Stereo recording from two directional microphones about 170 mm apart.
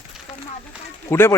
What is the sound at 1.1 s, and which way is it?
Speech, 15° left (ahead or behind).